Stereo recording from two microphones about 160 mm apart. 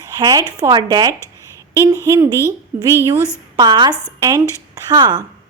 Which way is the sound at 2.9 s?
15° right (ahead or behind).